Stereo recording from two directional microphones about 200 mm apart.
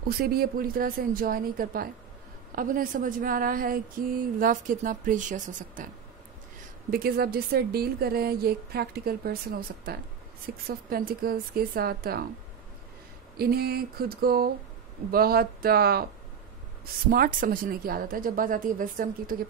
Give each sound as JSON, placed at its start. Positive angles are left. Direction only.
{"t": 0.0, "sound": "speech", "side_deg": -50}
{"t": 6.9, "sound": "speech", "side_deg": -50}
{"t": 13.4, "sound": "speech", "side_deg": -50}